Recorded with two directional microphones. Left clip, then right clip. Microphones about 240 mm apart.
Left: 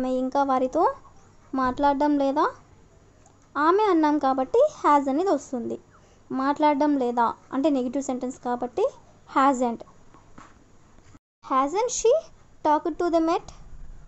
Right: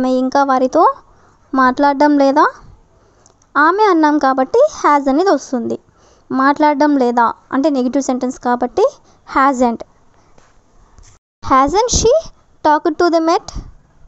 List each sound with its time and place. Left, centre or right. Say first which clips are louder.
0.0 s a woman's voice: right 10 dB; right
11.4 s a woman's voice: right 12 dB; right